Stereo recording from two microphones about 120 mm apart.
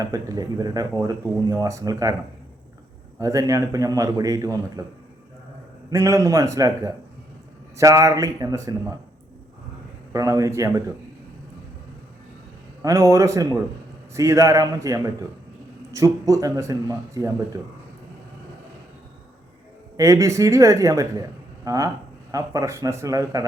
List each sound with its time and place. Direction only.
0.0 s speech: 30° right (ahead or behind)
3.2 s a man's voice: 30° right (ahead or behind)
5.9 s a man's voice: 25° right (ahead or behind)
10.1 s a man's voice: 30° right (ahead or behind)
12.8 s a man's voice: 25° right (ahead or behind)
20.0 s a man's voice: 25° right (ahead or behind)